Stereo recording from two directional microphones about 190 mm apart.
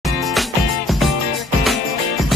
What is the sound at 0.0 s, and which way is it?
Music, centre (ahead or behind).